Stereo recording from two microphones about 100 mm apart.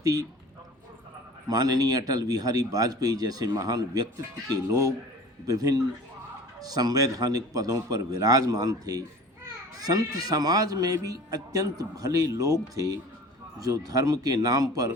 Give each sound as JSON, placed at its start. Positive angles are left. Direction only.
{"t": 0.0, "sound": "speech", "side_deg": -35}
{"t": 1.5, "sound": "speech", "side_deg": -40}
{"t": 5.5, "sound": "speech", "side_deg": -40}